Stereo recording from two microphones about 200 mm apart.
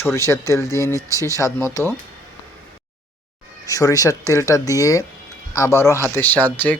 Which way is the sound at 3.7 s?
15° left (ahead or behind).